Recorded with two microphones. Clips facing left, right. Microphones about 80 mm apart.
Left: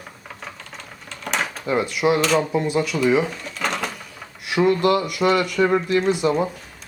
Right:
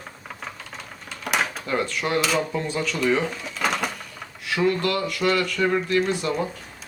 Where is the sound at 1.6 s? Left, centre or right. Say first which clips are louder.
Left 5 dB; centre.